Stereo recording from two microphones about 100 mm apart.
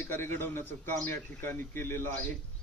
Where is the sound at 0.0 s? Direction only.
25° left (ahead or behind).